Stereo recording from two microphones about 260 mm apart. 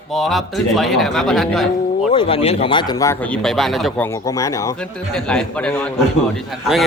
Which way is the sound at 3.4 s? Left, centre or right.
Centre.